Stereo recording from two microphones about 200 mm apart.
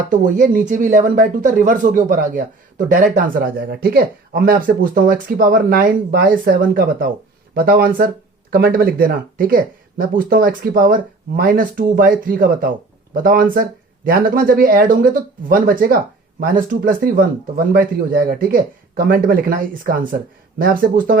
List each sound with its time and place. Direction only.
0.1 s speech: 40° right (ahead or behind)